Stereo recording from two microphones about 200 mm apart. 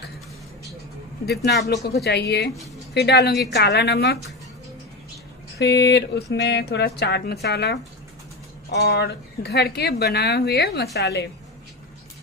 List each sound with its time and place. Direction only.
1.2 s speech: 55° left (ahead or behind)
5.6 s speech: 60° left (ahead or behind)